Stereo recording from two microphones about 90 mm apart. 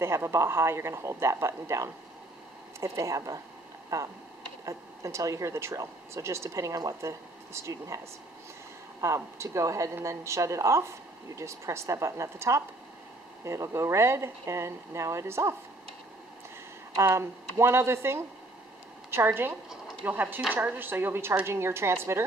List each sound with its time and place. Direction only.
0.0 s speech: 30° right (ahead or behind)
9.0 s speech: 35° right (ahead or behind)
16.9 s a woman's voice: 30° right (ahead or behind)